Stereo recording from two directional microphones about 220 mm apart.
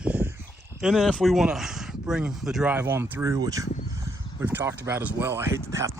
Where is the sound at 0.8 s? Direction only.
Centre (ahead or behind).